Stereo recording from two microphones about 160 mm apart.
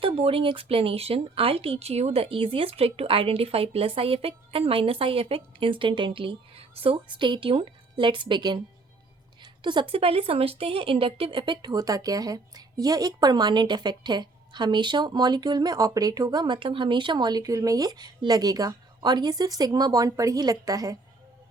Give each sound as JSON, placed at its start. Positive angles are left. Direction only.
{"t": 0.0, "sound": "speech", "side_deg": -35}
{"t": 9.4, "sound": "a sound", "side_deg": -30}
{"t": 9.9, "sound": "speech", "side_deg": -35}